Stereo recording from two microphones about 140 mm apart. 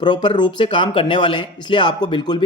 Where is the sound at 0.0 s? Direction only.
35° left (ahead or behind).